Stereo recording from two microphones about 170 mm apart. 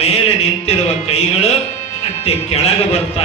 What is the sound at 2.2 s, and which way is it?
Speech, 35° left (ahead or behind).